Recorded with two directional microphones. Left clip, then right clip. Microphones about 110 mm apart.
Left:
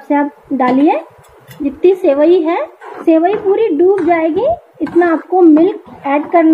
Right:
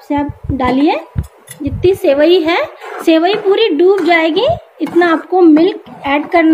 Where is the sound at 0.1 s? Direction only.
25° left (ahead or behind).